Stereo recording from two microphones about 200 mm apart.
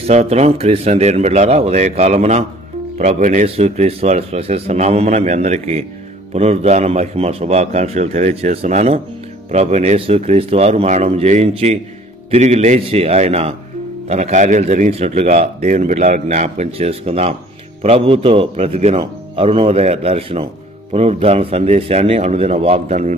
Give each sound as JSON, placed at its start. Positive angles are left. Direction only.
{"t": 0.0, "sound": "a man's voice", "side_deg": -30}